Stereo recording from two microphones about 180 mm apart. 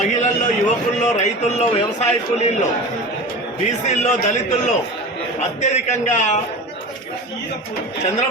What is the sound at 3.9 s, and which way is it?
Speech, 40° left (ahead or behind).